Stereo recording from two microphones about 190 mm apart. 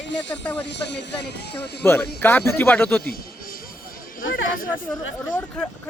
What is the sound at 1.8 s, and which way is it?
Speech, 10° left (ahead or behind).